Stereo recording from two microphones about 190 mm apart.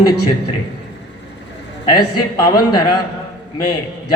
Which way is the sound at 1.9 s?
20° left (ahead or behind).